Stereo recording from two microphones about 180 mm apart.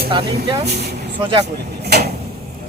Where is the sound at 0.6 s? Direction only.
65° right (ahead or behind).